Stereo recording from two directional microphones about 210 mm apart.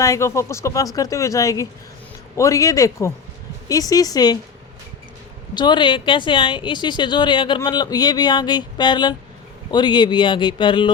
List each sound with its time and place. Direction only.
0.0 s speech: 15° left (ahead or behind)
5.5 s speech: 20° left (ahead or behind)